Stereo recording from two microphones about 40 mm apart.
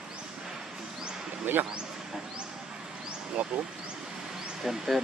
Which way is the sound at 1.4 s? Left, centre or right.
Right.